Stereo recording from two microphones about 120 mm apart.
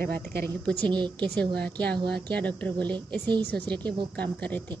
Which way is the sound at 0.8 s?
40° right (ahead or behind).